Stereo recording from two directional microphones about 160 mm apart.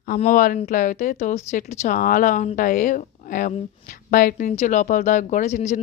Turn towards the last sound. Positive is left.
turn(degrees=50)  # may be behind; listen again after turning